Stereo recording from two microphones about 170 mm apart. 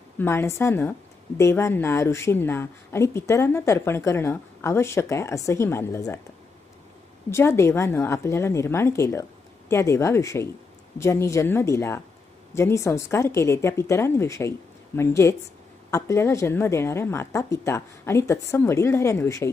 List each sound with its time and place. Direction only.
0.2 s speech: 15° left (ahead or behind)
7.3 s speech: 15° left (ahead or behind)